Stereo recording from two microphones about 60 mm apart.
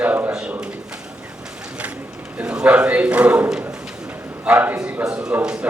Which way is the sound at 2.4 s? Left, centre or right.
Centre.